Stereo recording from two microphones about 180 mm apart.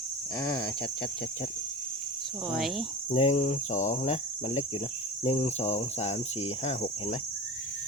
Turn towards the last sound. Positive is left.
turn(degrees=40)  # may be behind; listen again after turning